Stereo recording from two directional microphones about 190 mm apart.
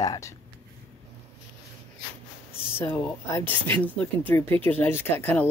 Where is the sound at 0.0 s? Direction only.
20° left (ahead or behind).